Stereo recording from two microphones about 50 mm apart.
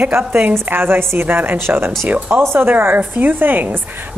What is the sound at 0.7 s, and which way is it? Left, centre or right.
Speech, right.